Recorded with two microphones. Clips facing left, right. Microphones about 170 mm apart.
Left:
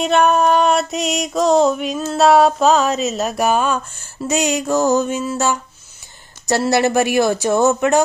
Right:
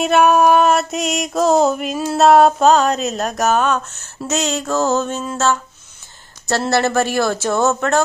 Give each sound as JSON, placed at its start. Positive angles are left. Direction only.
{"t": 0.0, "sound": "music", "side_deg": -5}
{"t": 6.7, "sound": "speech", "side_deg": 15}